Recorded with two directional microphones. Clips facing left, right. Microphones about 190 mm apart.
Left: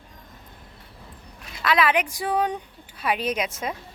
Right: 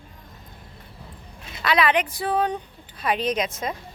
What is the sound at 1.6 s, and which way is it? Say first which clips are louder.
A woman's voice: right 1 dB; centre (ahead or behind).